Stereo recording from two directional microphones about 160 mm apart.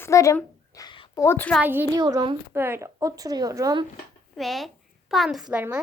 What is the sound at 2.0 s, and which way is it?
Speech, 25° right (ahead or behind).